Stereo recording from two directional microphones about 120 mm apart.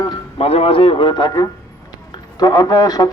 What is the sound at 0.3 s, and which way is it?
A man's voice, 55° left (ahead or behind).